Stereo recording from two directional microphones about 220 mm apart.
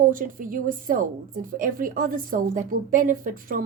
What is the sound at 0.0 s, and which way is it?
A woman's voice, 40° right (ahead or behind).